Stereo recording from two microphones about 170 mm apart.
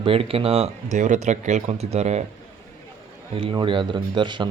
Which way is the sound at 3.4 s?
30° right (ahead or behind).